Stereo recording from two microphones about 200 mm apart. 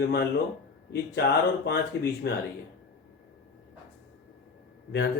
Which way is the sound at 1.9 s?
55° left (ahead or behind).